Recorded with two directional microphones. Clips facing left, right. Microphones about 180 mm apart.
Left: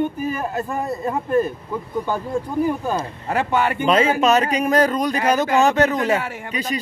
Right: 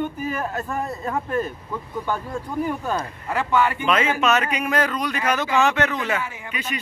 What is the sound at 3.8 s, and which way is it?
A man's voice, 35° left (ahead or behind).